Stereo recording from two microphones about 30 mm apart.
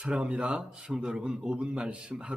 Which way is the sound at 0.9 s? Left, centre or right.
Right.